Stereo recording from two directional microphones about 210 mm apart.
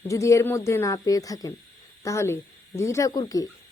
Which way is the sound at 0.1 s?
15° left (ahead or behind).